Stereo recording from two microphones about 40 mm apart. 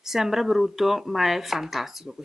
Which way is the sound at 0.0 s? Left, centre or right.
Centre.